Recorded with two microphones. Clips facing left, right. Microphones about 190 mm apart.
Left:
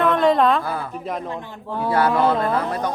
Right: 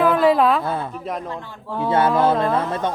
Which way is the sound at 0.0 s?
5° right (ahead or behind).